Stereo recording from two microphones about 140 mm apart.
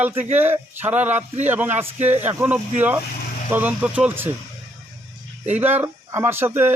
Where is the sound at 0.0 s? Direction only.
15° right (ahead or behind).